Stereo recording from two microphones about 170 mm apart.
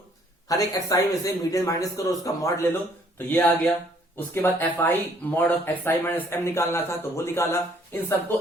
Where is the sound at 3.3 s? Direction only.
10° left (ahead or behind).